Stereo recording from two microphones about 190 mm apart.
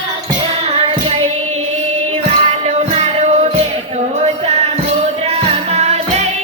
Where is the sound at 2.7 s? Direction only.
35° right (ahead or behind).